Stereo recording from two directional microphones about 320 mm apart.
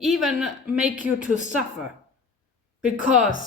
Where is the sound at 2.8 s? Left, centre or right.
Centre.